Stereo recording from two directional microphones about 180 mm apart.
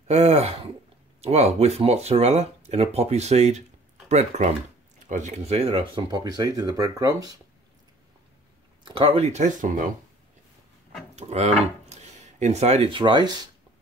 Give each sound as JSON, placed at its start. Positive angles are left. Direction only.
{"t": 0.1, "sound": "speech", "side_deg": -35}
{"t": 8.8, "sound": "speech", "side_deg": -30}
{"t": 11.1, "sound": "speech", "side_deg": -35}